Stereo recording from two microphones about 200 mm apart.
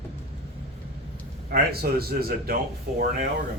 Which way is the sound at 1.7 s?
50° right (ahead or behind).